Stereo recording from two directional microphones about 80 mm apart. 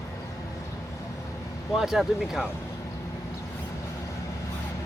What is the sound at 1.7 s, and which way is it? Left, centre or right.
Speech, centre.